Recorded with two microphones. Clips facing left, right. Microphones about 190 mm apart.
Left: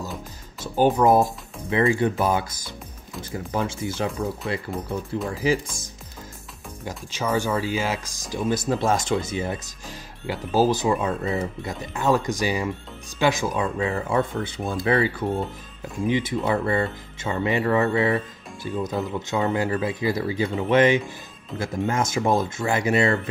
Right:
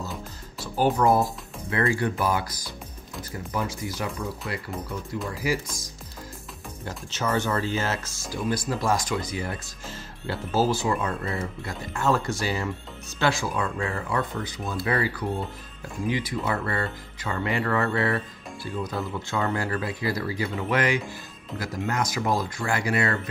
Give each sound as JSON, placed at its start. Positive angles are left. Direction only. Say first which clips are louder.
{"t": 0.7, "sound": "speech", "louder": "left 4 dB", "side_deg": 20}
{"t": 6.8, "sound": "speech", "louder": "left 2 dB", "side_deg": 15}